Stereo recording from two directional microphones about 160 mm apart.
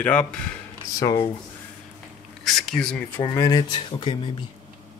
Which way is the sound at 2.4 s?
Centre (ahead or behind).